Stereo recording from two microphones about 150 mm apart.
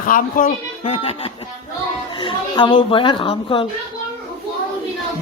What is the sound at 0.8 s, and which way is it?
Speech, 40° left (ahead or behind).